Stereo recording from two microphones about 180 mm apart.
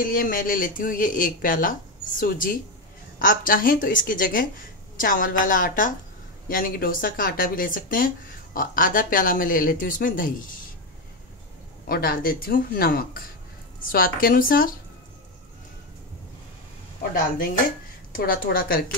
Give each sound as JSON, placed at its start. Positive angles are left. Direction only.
{"t": 0.0, "sound": "speech", "side_deg": 50}
{"t": 11.9, "sound": "speech", "side_deg": 55}
{"t": 18.1, "sound": "speech", "side_deg": 50}